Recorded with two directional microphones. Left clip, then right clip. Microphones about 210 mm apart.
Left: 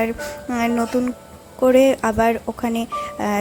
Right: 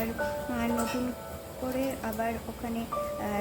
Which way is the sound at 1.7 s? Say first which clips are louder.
Left 15 dB; 45° left (ahead or behind).